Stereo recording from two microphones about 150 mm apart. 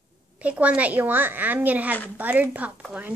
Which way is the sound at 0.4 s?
10° right (ahead or behind).